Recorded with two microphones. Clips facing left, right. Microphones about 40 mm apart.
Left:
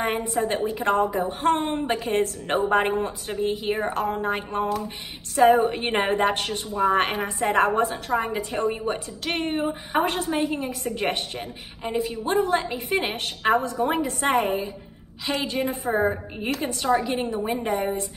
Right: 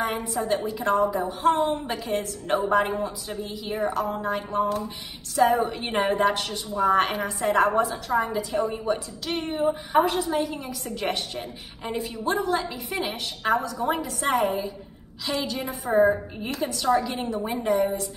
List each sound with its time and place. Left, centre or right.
0.0 s a woman's voice: left
6.7 s a woman's voice: left
11.8 s a woman's voice: centre
12.3 s a woman's voice: left
15.9 s a woman's voice: left